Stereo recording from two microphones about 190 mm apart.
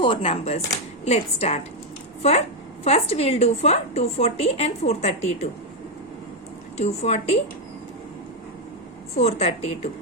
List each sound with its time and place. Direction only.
0.0 s a woman's voice: 30° left (ahead or behind)
2.8 s a woman's voice: 30° left (ahead or behind)
6.7 s a woman's voice: 35° left (ahead or behind)
9.1 s a woman's voice: 35° left (ahead or behind)